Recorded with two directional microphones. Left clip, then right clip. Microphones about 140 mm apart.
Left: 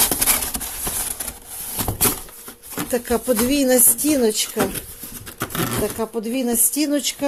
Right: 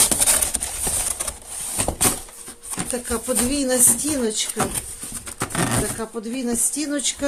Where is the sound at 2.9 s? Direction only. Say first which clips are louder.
Left 6 dB; 55° left (ahead or behind).